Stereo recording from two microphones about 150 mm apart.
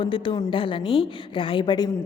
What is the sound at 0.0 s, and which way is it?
A woman's voice, 35° left (ahead or behind).